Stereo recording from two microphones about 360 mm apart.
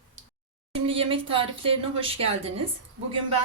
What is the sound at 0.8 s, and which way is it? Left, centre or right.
Speech, centre.